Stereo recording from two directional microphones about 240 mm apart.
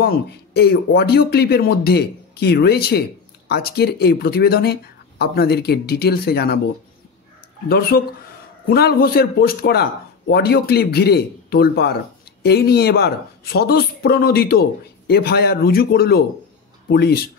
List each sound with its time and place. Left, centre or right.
0.0 s speech: left
7.6 s speech: left